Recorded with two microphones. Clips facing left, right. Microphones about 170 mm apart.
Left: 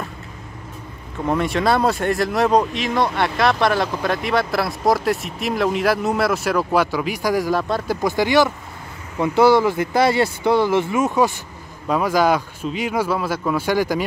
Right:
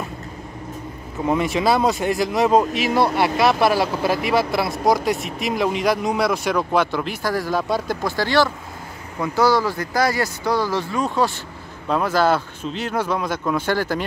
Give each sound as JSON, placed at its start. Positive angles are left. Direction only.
{"t": 1.2, "sound": "speech", "side_deg": -5}
{"t": 7.5, "sound": "speech", "side_deg": -5}
{"t": 8.0, "sound": "speech", "side_deg": 20}